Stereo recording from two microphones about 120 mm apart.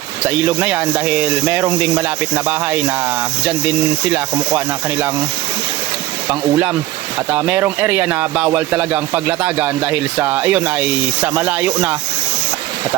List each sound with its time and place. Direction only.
0.3 s speech: 15° right (ahead or behind)
4.1 s speech: 15° right (ahead or behind)
7.3 s speech: 15° right (ahead or behind)